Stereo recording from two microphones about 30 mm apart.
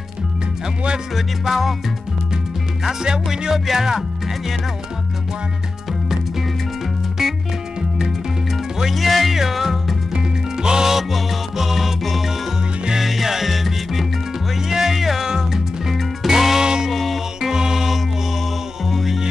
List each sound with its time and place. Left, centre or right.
1.1 s music: centre
3.0 s music: right
3.5 s speech: centre
8.9 s music: centre
10.1 s music: right
10.9 s music: centre
15.2 s music: right
15.9 s music: centre
16.6 s music: right
16.9 s music: centre
17.4 s music: centre
18.9 s music: centre